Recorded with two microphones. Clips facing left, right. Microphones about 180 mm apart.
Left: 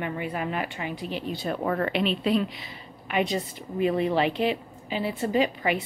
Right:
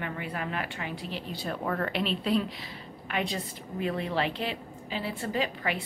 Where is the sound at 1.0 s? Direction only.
55° left (ahead or behind).